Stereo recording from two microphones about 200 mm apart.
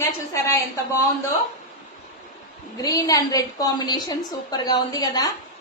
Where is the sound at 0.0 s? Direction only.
15° left (ahead or behind).